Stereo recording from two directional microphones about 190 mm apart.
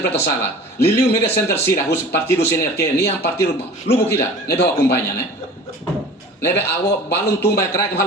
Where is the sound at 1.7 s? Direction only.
60° left (ahead or behind).